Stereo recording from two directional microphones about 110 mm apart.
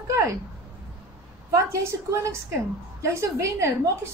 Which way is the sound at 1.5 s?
25° right (ahead or behind).